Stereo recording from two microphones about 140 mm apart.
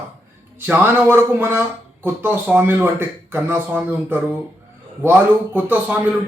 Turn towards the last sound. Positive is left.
turn(degrees=-10)  # may be behind; listen again after turning